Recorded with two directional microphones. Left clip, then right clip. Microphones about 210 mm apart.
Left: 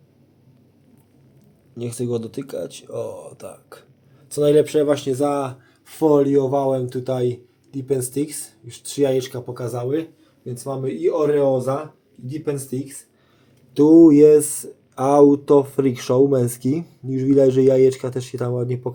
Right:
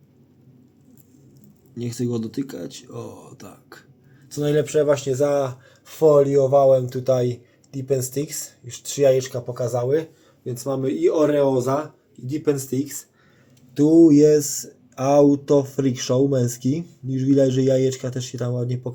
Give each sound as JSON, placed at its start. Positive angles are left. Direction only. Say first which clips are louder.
{"t": 1.8, "sound": "speech", "louder": "left 2 dB", "side_deg": 10}
{"t": 10.4, "sound": "speech", "louder": "right 2 dB", "side_deg": -20}
{"t": 13.7, "sound": "speech", "louder": "left 3 dB", "side_deg": 20}